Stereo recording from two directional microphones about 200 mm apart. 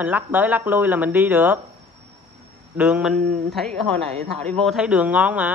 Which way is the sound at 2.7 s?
5° right (ahead or behind).